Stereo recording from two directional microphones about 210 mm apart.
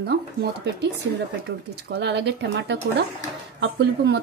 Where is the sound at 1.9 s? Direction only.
55° right (ahead or behind).